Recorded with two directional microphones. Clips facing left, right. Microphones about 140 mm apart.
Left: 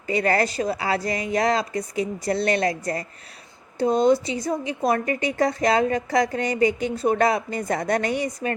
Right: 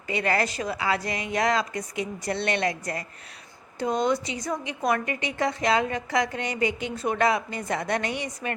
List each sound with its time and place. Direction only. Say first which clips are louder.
0.1 s a woman's voice: left 4 dB; 40° left (ahead or behind)